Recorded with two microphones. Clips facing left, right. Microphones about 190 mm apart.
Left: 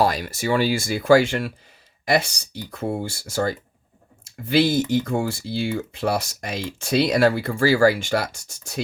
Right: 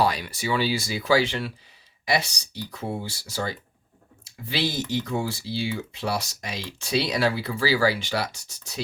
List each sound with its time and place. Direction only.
0.0 s speech: 45° left (ahead or behind)